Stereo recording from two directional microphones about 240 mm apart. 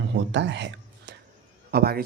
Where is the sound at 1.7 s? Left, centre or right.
Right.